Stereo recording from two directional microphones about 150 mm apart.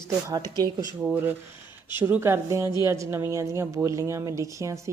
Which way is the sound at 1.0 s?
10° right (ahead or behind).